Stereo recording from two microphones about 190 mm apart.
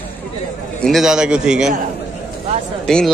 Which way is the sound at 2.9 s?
5° left (ahead or behind).